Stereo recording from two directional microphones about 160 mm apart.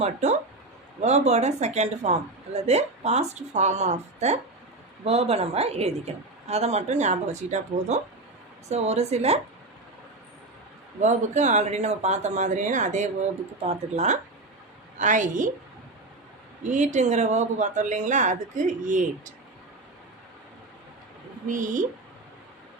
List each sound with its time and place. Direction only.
0.0 s a woman's voice: 45° right (ahead or behind)
11.0 s a woman's voice: 45° right (ahead or behind)
16.6 s a woman's voice: 50° right (ahead or behind)
21.4 s a woman's voice: 55° right (ahead or behind)